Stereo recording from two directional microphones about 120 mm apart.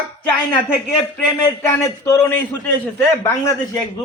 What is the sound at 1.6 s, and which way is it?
Speech, 25° left (ahead or behind).